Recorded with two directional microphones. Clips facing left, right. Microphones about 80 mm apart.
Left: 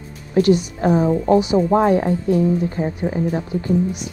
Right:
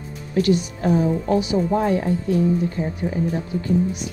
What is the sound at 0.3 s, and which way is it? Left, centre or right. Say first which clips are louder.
Speech: left 4 dB; left.